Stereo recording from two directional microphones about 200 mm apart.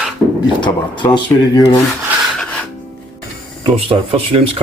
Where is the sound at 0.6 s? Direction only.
25° left (ahead or behind).